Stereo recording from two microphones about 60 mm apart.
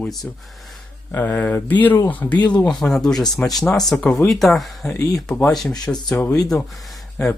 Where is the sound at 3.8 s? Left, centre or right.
Centre.